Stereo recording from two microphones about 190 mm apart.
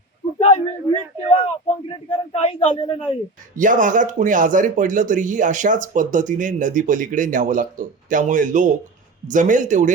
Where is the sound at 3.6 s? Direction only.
45° right (ahead or behind).